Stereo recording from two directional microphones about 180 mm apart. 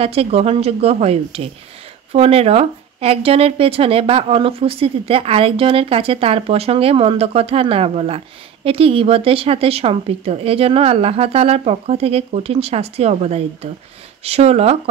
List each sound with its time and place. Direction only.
0.0 s a woman's voice: 35° right (ahead or behind)